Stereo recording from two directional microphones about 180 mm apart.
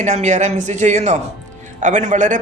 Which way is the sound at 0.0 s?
40° right (ahead or behind).